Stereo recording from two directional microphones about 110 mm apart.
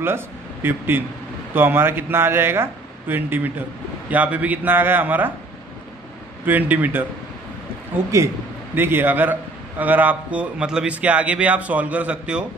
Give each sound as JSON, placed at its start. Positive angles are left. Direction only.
{"t": 0.0, "sound": "a man's voice", "side_deg": -20}
{"t": 6.4, "sound": "a man's voice", "side_deg": -15}